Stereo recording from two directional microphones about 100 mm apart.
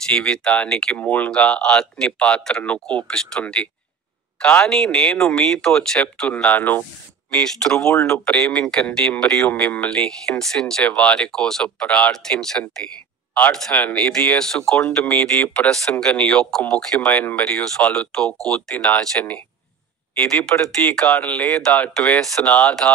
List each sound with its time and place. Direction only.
0.1 s speech: 10° left (ahead or behind)
7.2 s speech: 5° left (ahead or behind)
7.9 s speech: 25° left (ahead or behind)
8.3 s speech: 10° left (ahead or behind)
17.1 s speech: 15° left (ahead or behind)
21.0 s speech: 15° left (ahead or behind)